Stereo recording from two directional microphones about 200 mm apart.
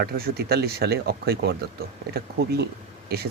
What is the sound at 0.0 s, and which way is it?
Speech, 50° right (ahead or behind).